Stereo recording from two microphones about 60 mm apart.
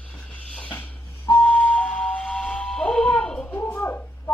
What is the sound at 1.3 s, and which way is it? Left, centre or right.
Whistle, left.